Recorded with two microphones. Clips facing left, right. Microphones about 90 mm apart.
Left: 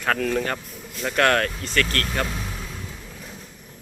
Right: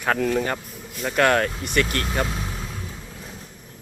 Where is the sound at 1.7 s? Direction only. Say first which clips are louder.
Right 1 dB; 15° right (ahead or behind).